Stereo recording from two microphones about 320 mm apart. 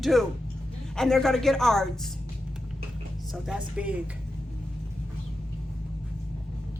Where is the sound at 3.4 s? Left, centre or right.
Centre.